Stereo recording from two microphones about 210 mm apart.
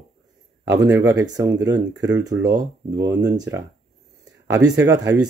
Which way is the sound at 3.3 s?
15° right (ahead or behind).